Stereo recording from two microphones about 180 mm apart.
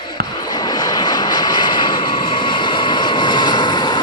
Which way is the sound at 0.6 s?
20° left (ahead or behind).